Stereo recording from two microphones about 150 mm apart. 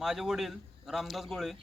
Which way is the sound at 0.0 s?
Centre (ahead or behind).